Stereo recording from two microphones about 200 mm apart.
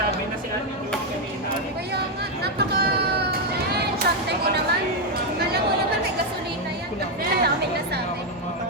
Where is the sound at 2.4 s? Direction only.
55° right (ahead or behind).